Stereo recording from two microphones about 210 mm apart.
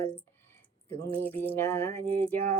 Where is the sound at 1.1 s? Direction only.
10° left (ahead or behind).